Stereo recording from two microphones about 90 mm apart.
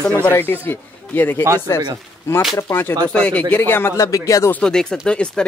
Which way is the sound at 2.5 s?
30° left (ahead or behind).